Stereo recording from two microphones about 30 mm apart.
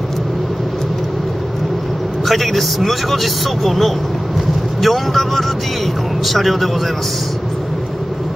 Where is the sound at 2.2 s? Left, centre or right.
Centre.